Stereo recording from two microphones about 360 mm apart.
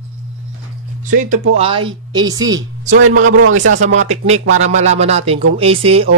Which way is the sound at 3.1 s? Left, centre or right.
Right.